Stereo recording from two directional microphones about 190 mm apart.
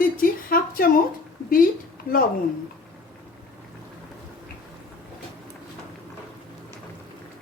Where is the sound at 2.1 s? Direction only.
50° left (ahead or behind).